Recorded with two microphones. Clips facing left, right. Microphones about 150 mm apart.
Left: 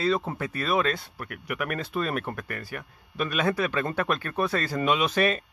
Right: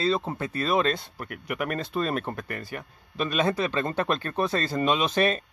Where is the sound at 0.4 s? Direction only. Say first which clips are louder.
Right 1 dB; 30° right (ahead or behind).